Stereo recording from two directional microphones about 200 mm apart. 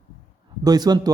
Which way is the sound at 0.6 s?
20° right (ahead or behind).